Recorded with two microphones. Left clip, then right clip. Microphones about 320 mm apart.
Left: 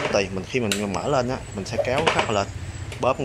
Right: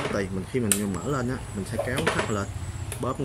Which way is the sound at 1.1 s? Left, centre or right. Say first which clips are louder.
Left 9 dB; left.